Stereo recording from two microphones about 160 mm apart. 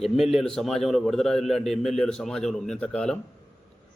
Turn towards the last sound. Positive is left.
turn(degrees=5)  # may be behind; listen again after turning